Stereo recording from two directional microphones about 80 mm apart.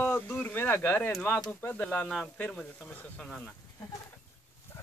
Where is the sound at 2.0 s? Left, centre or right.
Centre.